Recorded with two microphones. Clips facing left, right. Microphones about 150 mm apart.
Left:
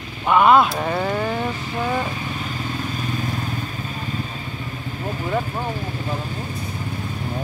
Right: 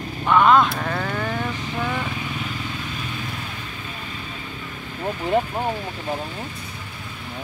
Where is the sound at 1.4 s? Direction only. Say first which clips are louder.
Left 2 dB; 35° left (ahead or behind).